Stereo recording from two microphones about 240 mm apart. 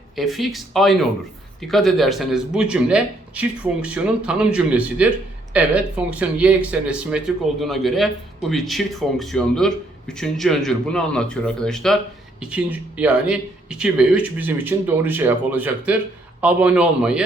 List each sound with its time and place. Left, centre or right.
0.2 s speech: centre